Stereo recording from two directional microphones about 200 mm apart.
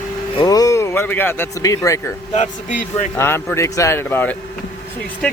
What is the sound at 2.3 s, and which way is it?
Speech, 35° left (ahead or behind).